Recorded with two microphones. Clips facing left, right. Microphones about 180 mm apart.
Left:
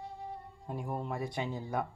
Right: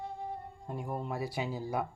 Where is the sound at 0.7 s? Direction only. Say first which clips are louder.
Even; centre (ahead or behind).